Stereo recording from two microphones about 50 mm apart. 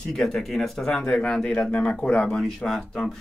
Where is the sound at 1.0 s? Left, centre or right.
Left.